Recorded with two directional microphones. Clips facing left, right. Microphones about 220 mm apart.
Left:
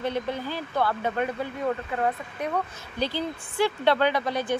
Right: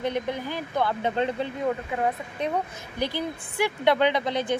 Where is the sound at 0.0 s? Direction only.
15° right (ahead or behind).